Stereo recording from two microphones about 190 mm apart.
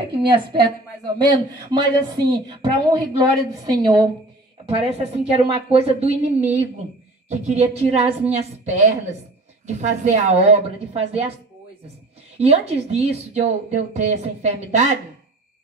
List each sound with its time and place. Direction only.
0.1 s a woman's voice: 25° right (ahead or behind)
4.6 s speech: 30° right (ahead or behind)
12.4 s speech: 30° right (ahead or behind)